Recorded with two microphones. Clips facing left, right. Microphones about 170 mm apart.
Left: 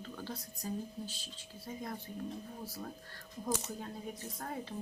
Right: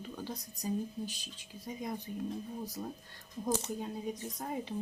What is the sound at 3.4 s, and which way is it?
Speech, 15° right (ahead or behind).